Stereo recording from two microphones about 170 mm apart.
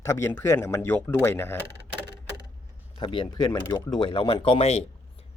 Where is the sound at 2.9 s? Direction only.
30° left (ahead or behind).